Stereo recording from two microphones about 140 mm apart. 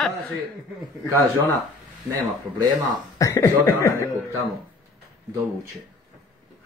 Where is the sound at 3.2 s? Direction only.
20° left (ahead or behind).